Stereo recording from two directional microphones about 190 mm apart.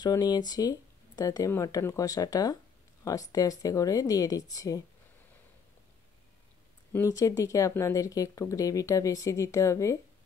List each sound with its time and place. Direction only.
0.0 s speech: 20° left (ahead or behind)
6.9 s speech: 15° left (ahead or behind)